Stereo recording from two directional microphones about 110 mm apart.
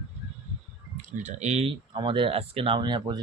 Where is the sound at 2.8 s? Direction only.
40° right (ahead or behind).